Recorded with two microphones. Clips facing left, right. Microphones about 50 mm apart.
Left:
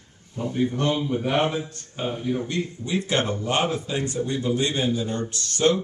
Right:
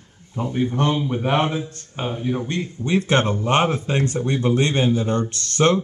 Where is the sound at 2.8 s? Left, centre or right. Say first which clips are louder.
Right 7 dB; right.